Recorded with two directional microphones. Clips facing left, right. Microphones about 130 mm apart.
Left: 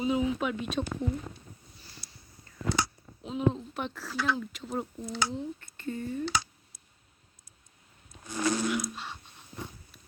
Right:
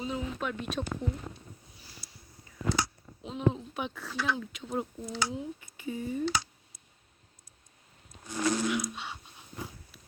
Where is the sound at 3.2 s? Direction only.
Centre (ahead or behind).